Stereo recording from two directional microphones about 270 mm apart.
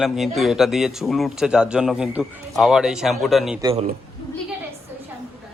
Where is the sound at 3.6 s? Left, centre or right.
Centre.